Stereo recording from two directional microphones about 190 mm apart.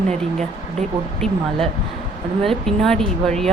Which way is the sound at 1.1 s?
Centre (ahead or behind).